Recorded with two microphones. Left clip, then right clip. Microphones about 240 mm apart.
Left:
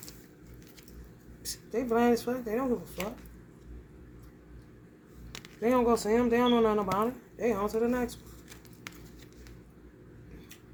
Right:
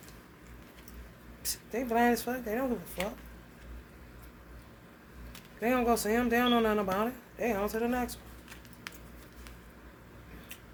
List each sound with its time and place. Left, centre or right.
1.5 s speech: centre
5.5 s speech: centre